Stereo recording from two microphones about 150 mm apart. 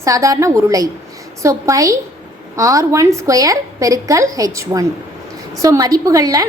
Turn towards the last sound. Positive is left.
turn(degrees=-20)  # may be behind; listen again after turning